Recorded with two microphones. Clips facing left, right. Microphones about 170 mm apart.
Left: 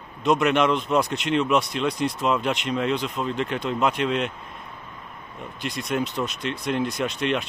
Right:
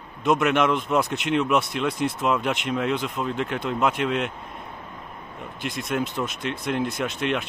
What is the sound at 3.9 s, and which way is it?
Speech, 60° right (ahead or behind).